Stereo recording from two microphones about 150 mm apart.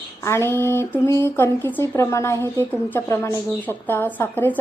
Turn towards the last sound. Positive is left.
turn(degrees=15)  # may be behind; listen again after turning